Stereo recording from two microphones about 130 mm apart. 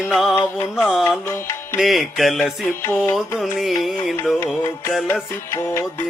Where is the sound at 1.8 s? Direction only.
Centre (ahead or behind).